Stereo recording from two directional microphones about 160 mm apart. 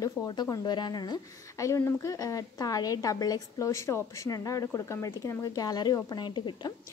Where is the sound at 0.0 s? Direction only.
25° left (ahead or behind).